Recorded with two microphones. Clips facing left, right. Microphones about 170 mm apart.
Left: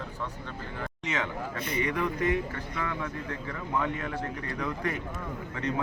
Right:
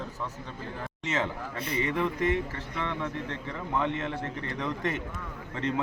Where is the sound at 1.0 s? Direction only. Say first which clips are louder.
Right 2 dB; 30° right (ahead or behind).